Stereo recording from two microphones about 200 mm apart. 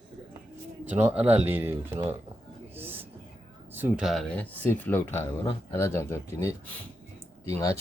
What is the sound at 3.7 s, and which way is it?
Speech, 5° right (ahead or behind).